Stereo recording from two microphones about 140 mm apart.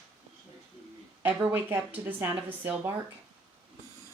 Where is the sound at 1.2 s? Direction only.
10° right (ahead or behind).